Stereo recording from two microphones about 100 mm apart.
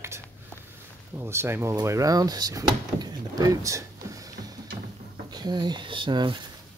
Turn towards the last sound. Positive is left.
turn(degrees=-55)  # may be behind; listen again after turning